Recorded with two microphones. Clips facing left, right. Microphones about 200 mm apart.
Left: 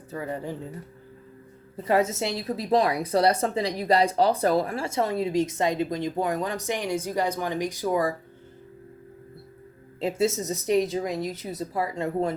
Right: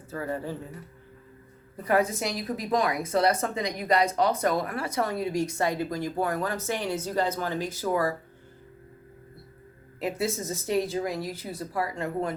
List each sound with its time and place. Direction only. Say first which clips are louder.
0.1 s speech: even; 20° left (ahead or behind)
1.7 s speech: left 1 dB; 25° left (ahead or behind)
10.0 s speech: left 4 dB; 25° left (ahead or behind)